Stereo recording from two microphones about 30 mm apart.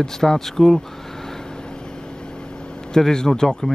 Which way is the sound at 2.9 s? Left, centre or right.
Left.